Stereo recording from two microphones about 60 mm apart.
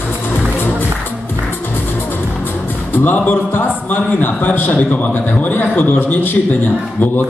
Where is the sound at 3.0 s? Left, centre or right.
Left.